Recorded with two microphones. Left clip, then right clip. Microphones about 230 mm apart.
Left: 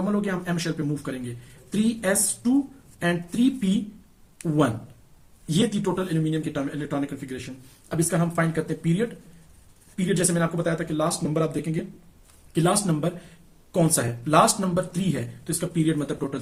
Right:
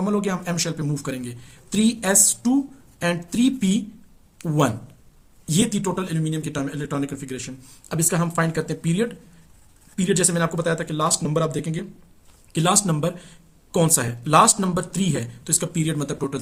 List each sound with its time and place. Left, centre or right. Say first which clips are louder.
0.0 s speech: right 3 dB; right
5.5 s speech: right 1 dB; right